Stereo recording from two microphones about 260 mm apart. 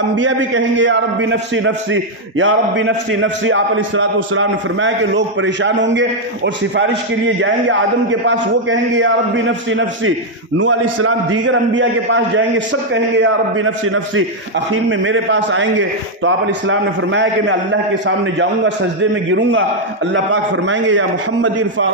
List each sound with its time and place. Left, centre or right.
0.1 s a man's voice: right
20.6 s a man's voice: right